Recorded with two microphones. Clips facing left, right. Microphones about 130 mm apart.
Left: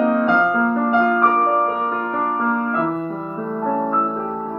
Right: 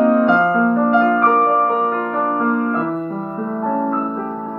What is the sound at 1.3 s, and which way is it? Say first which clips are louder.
Music: right 3 dB; 25° right (ahead or behind).